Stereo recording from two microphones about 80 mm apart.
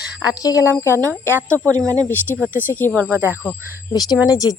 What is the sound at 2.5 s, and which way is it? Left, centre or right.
Speech, right.